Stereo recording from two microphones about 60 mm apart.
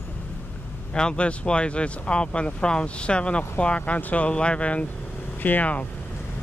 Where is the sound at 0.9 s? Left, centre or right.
Centre.